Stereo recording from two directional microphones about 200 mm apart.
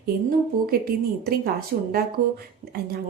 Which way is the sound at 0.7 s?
50° right (ahead or behind).